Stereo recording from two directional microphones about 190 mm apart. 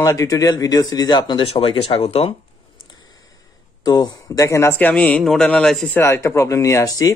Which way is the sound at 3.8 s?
20° left (ahead or behind).